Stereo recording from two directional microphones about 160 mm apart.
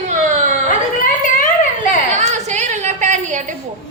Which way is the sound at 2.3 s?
50° right (ahead or behind).